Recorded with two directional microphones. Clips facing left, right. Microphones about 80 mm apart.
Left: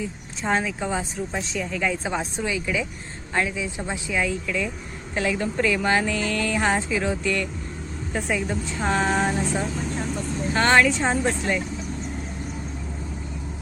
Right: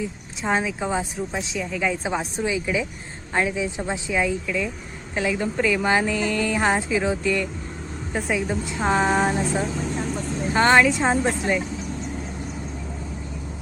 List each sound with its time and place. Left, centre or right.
0.4 s speech: centre
1.3 s speech: centre